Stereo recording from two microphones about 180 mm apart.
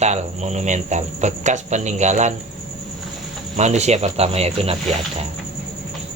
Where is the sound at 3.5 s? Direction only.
40° right (ahead or behind).